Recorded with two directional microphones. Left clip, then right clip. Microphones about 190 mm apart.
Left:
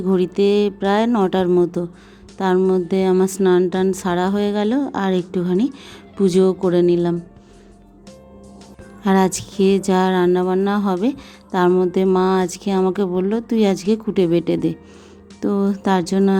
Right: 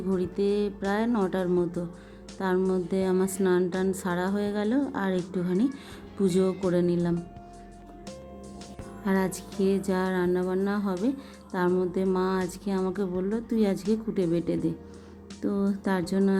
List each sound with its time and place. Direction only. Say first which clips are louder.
0.1 s speech: left 10 dB; 35° left (ahead or behind)
9.0 s speech: left 11 dB; 40° left (ahead or behind)